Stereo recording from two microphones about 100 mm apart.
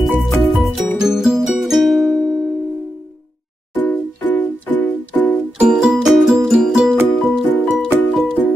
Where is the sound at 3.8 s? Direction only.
15° left (ahead or behind).